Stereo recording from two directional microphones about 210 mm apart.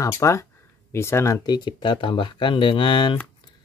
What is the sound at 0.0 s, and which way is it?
Speech, 15° left (ahead or behind).